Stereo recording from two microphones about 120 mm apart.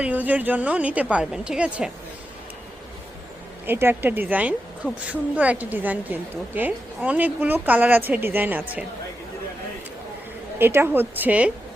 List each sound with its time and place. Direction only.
0.0 s a woman's voice: 15° right (ahead or behind)
3.7 s a woman's voice: 20° right (ahead or behind)
10.6 s a woman's voice: 20° right (ahead or behind)